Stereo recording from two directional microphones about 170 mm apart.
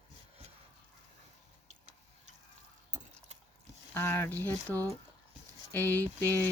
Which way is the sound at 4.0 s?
15° left (ahead or behind).